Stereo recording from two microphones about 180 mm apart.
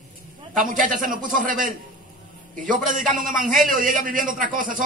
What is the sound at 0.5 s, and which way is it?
A man's voice, 50° right (ahead or behind).